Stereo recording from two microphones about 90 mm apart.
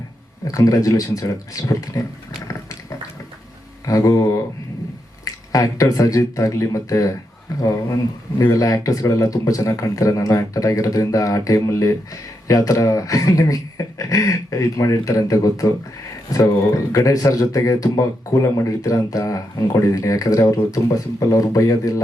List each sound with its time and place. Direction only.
0.4 s speech: 40° left (ahead or behind)
3.8 s speech: 40° left (ahead or behind)
8.4 s speech: 40° left (ahead or behind)